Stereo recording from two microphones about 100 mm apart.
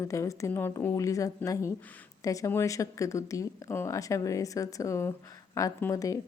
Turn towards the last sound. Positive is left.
turn(degrees=35)  # may be behind; listen again after turning